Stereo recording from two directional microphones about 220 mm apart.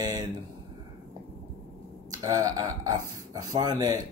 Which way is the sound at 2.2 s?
15° right (ahead or behind).